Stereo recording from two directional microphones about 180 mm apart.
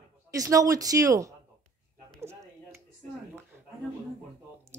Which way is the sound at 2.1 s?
15° right (ahead or behind).